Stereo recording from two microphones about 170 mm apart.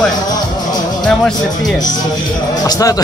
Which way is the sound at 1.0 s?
5° left (ahead or behind).